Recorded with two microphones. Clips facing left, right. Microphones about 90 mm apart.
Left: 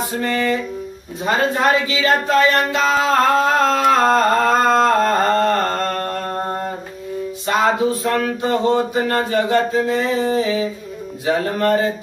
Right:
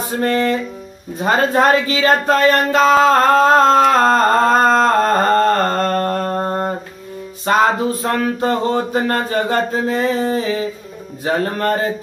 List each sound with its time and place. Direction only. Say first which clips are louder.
0.2 s speech: right 4 dB; 40° right (ahead or behind)
5.2 s mantra: right 2 dB; 45° right (ahead or behind)
7.4 s a sound: right 2 dB; 45° right (ahead or behind)
11.2 s speech: even; 40° right (ahead or behind)